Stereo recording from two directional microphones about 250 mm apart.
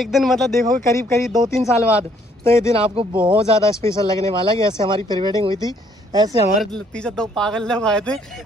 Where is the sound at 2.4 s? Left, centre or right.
Centre.